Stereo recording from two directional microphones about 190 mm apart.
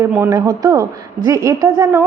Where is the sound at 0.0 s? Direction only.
10° right (ahead or behind).